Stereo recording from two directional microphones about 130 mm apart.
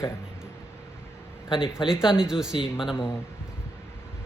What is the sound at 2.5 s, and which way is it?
Speech, 40° left (ahead or behind).